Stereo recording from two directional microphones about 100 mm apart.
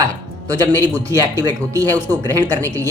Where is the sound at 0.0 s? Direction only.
40° right (ahead or behind).